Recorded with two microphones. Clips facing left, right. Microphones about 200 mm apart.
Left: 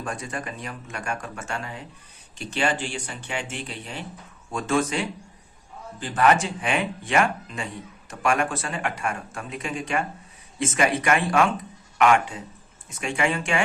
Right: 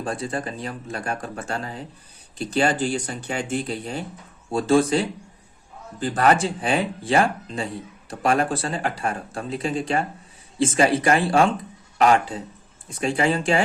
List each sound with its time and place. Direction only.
0.0 s speech: 30° right (ahead or behind)